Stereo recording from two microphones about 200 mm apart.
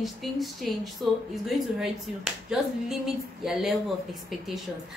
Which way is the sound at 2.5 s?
5° right (ahead or behind).